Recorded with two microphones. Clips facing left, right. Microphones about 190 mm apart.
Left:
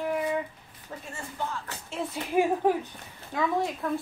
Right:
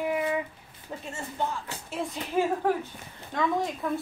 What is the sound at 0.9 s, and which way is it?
Speech, 20° right (ahead or behind).